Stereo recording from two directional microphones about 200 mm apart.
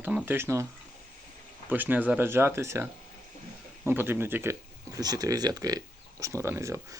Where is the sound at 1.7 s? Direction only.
10° right (ahead or behind).